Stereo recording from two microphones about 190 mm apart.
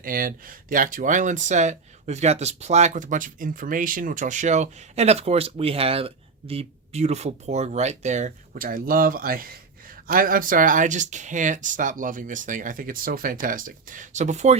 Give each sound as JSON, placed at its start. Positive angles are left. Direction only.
{"t": 0.0, "sound": "speech", "side_deg": -50}